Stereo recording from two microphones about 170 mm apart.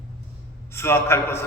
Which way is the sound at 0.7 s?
15° left (ahead or behind).